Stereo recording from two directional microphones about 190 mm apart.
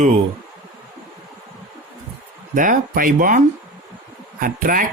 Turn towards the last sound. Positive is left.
turn(degrees=-50)  # may be behind; listen again after turning